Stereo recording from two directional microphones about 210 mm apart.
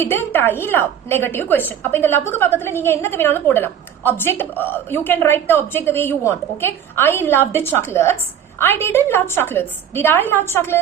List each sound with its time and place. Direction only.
0.0 s a woman's voice: 10° left (ahead or behind)